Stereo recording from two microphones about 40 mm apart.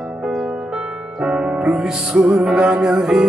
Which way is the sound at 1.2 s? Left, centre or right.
Right.